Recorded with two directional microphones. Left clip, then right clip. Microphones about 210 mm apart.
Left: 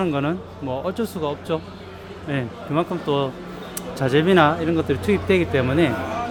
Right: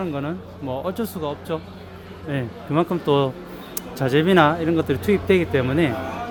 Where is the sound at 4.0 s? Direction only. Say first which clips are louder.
Even; 5° right (ahead or behind).